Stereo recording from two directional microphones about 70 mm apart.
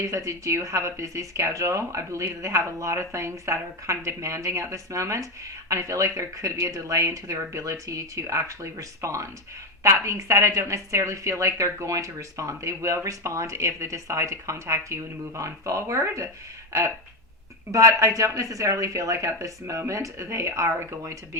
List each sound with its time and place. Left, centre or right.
0.0 s speech: right
17.7 s speech: right